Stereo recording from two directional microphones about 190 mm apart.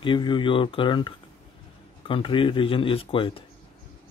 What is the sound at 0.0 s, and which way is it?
Speech, 25° left (ahead or behind).